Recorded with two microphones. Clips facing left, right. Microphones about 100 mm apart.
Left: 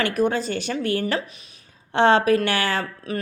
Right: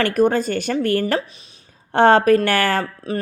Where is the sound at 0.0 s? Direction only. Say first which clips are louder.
Right 5 dB; 45° right (ahead or behind).